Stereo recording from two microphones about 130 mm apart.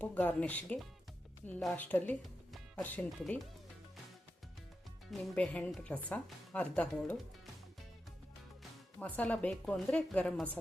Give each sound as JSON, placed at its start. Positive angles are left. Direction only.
{"t": 0.0, "sound": "speech", "side_deg": 10}
{"t": 5.3, "sound": "speech", "side_deg": 10}
{"t": 9.0, "sound": "speech", "side_deg": 10}